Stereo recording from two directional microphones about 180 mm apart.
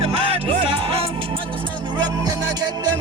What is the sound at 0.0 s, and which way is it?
Music, 30° right (ahead or behind).